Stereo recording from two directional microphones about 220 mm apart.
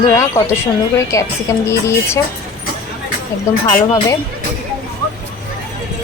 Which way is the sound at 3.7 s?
15° left (ahead or behind).